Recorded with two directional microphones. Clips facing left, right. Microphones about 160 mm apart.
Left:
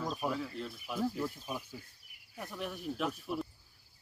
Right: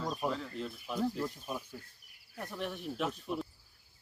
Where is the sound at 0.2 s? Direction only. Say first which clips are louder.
Even; 5° left (ahead or behind).